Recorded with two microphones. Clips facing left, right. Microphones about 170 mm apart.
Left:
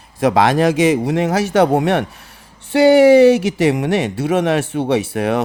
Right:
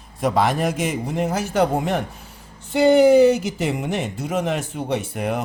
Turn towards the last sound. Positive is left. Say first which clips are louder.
# left 7 dB
turn(degrees=85)